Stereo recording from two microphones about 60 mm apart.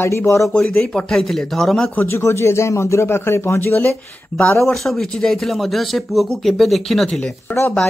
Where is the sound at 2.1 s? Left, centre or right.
Left.